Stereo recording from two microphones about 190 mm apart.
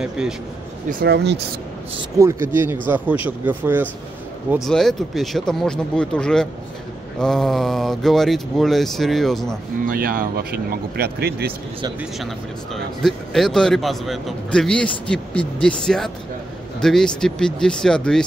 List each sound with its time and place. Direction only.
0.2 s speech: 5° right (ahead or behind)
0.8 s speech: 60° right (ahead or behind)
2.1 s speech: 15° right (ahead or behind)
4.6 s speech: centre (ahead or behind)
9.8 s speech: 50° right (ahead or behind)
12.7 s speech: centre (ahead or behind)